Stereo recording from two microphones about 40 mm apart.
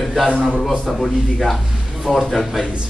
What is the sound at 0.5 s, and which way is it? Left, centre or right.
Speech, centre.